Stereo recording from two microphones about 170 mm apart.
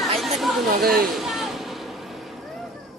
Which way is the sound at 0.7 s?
60° right (ahead or behind).